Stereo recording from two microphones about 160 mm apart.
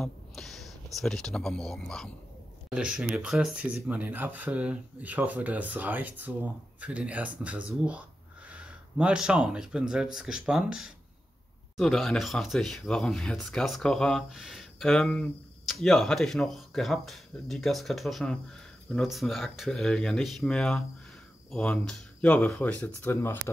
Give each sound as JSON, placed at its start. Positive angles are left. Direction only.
{"t": 0.0, "sound": "speech", "side_deg": 0}